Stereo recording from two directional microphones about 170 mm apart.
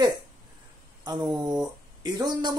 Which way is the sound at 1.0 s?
25° right (ahead or behind).